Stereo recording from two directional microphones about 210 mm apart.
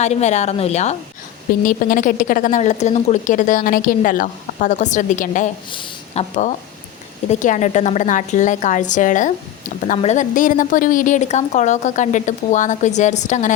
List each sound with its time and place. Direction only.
0.0 s a woman's voice: 30° left (ahead or behind)
5.7 s a woman's voice: 25° left (ahead or behind)